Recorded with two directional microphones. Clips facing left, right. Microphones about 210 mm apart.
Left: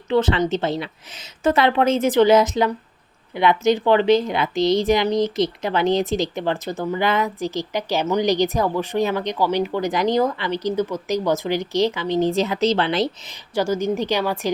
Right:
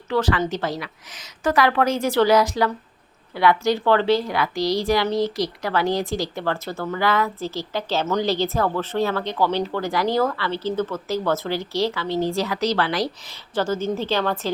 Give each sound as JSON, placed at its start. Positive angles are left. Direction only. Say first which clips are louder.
{"t": 0.1, "sound": "a woman's voice", "louder": "left 3 dB", "side_deg": 25}
{"t": 13.5, "sound": "a woman's voice", "louder": "left 2 dB", "side_deg": 10}